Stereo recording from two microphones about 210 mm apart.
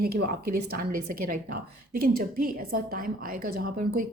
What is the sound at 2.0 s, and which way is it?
A woman's voice, 45° right (ahead or behind).